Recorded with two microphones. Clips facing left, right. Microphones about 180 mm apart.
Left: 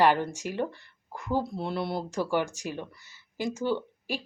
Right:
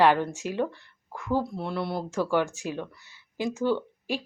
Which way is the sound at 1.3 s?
20° left (ahead or behind).